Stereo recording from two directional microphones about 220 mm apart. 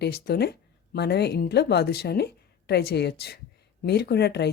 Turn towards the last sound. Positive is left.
turn(degrees=50)  # may be behind; listen again after turning